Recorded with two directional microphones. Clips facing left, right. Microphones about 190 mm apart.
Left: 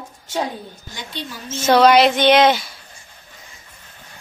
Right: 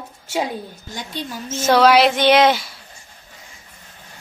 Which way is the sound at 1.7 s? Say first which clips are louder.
Left 1 dB; 5° right (ahead or behind).